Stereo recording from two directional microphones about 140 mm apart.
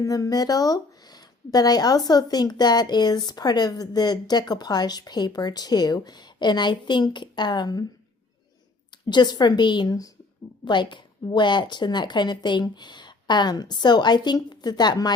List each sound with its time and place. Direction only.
0.0 s a woman's voice: 25° left (ahead or behind)
8.9 s a woman's voice: 30° left (ahead or behind)